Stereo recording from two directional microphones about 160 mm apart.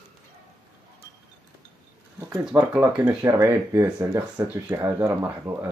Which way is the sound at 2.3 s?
10° right (ahead or behind).